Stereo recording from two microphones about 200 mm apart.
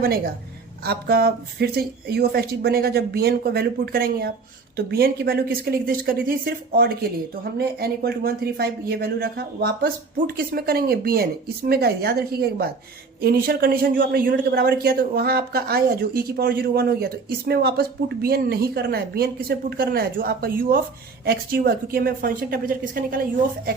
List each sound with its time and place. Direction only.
0.9 s speech: 50° right (ahead or behind)